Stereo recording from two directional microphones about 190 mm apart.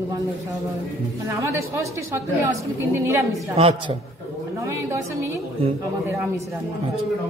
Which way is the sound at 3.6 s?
30° right (ahead or behind).